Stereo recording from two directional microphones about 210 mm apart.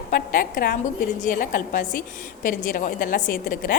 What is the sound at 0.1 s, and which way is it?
A woman's voice, 45° left (ahead or behind).